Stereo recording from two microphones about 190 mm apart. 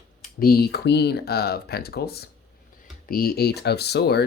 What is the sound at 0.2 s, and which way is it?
Speech, 50° left (ahead or behind).